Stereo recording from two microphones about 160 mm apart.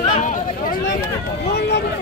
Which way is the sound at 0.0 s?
50° left (ahead or behind).